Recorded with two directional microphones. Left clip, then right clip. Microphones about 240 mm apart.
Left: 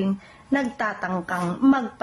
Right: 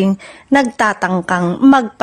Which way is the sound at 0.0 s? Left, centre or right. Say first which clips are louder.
Right 10 dB; right.